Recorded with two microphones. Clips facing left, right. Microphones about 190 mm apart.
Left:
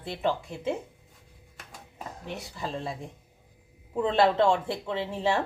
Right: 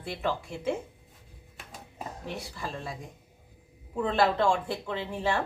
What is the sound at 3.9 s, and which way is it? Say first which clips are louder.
Speech: left 3 dB; 20° left (ahead or behind).